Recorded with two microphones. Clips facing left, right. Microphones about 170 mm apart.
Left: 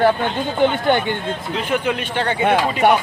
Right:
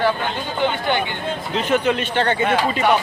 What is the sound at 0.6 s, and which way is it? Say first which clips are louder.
Speech: left 4 dB; 50° left (ahead or behind).